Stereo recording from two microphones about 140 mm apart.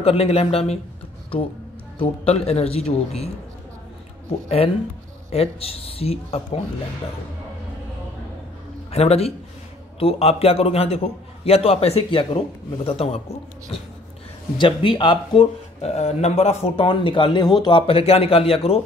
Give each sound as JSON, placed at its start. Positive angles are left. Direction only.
{"t": 0.0, "sound": "a man's voice", "side_deg": 45}
{"t": 2.0, "sound": "a man's voice", "side_deg": 45}
{"t": 5.3, "sound": "a man's voice", "side_deg": 45}
{"t": 8.9, "sound": "a man's voice", "side_deg": 45}
{"t": 14.6, "sound": "speech", "side_deg": 35}